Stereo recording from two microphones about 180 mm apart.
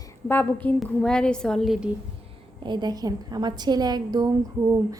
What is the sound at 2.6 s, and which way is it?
A woman's voice, 25° right (ahead or behind).